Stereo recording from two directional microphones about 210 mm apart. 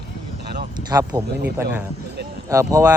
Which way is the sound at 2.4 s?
15° right (ahead or behind).